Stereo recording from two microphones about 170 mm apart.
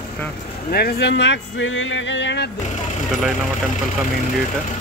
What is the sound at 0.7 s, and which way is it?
Speech, 65° left (ahead or behind).